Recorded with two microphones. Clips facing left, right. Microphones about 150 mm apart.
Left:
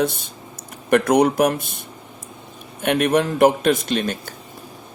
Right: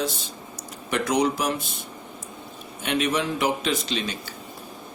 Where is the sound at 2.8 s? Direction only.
55° left (ahead or behind).